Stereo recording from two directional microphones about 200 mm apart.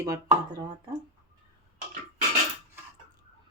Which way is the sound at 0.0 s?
20° right (ahead or behind).